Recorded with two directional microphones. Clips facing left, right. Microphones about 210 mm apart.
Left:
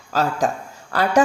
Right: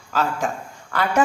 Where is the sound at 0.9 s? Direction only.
35° left (ahead or behind).